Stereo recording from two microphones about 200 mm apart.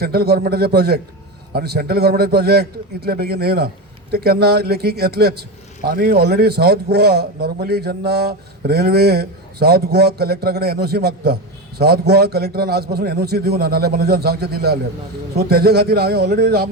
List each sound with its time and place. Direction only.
0.0 s a man's voice: 50° right (ahead or behind)